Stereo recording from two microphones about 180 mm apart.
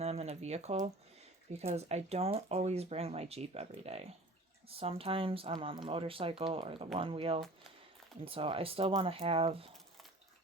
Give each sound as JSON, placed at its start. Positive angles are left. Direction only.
{"t": 0.0, "sound": "speech", "side_deg": -35}